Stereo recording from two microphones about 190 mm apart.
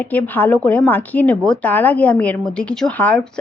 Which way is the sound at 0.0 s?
10° left (ahead or behind).